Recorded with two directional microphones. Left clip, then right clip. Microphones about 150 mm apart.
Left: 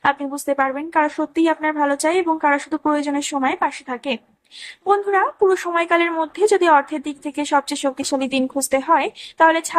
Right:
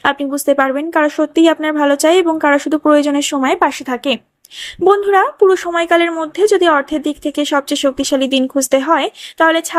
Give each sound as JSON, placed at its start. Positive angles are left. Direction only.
{"t": 0.0, "sound": "speech", "side_deg": -35}